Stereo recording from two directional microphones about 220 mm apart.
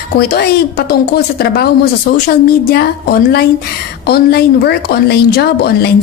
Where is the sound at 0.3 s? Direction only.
45° left (ahead or behind).